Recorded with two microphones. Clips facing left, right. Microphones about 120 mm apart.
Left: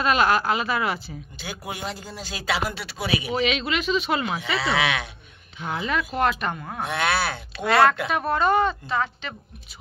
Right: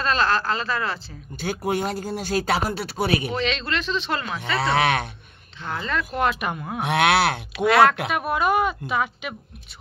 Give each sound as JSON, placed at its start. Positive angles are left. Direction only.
{"t": 0.0, "sound": "speech", "side_deg": 15}
{"t": 1.4, "sound": "speech", "side_deg": -50}
{"t": 3.3, "sound": "speech", "side_deg": 10}
{"t": 4.6, "sound": "speech", "side_deg": -50}
{"t": 5.6, "sound": "speech", "side_deg": 10}
{"t": 6.5, "sound": "speech", "side_deg": -10}
{"t": 6.8, "sound": "speech", "side_deg": -70}
{"t": 7.5, "sound": "speech", "side_deg": 0}